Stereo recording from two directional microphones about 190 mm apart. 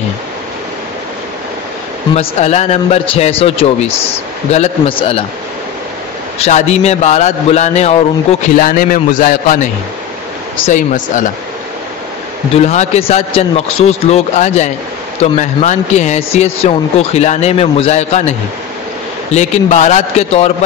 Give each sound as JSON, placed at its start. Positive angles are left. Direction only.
{"t": 2.1, "sound": "a man's voice", "side_deg": 35}
{"t": 6.4, "sound": "speech", "side_deg": 35}
{"t": 8.6, "sound": "a man's voice", "side_deg": 45}
{"t": 12.5, "sound": "speech", "side_deg": 35}
{"t": 19.3, "sound": "speech", "side_deg": 35}